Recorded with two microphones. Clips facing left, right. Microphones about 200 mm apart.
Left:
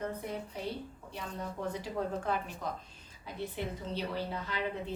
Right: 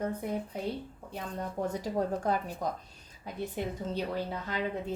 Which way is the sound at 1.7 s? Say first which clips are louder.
Right 3 dB; 40° right (ahead or behind).